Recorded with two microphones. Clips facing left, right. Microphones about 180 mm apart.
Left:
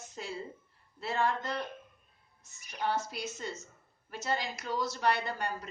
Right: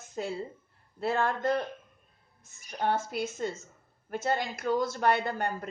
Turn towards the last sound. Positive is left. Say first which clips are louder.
# right 4 dB
turn(degrees=-55)  # may be behind; listen again after turning